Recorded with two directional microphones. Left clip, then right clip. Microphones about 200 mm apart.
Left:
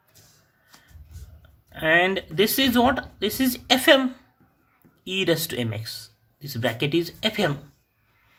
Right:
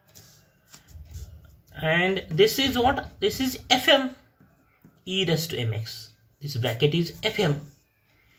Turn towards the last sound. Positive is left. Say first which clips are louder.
# left 2 dB
turn(degrees=50)  # may be behind; listen again after turning